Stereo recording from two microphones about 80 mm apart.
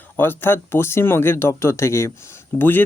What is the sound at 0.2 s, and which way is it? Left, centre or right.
Speech, left.